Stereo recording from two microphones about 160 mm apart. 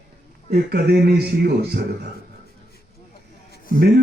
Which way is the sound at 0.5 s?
80° right.